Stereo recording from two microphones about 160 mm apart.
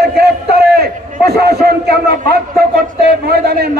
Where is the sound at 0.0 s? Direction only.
80° right.